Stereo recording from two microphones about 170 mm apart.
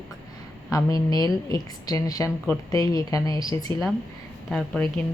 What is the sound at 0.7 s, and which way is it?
A woman's voice, 20° left (ahead or behind).